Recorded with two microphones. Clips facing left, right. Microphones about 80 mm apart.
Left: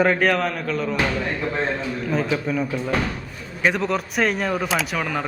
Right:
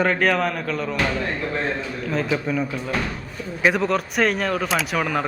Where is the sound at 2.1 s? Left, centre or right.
Centre.